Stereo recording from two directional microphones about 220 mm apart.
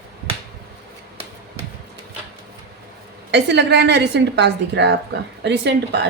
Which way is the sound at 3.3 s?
50° right (ahead or behind).